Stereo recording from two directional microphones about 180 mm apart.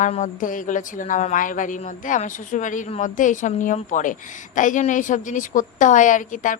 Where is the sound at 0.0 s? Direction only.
45° left (ahead or behind).